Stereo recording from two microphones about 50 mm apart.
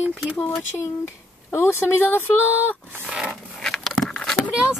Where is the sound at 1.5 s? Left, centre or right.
Left.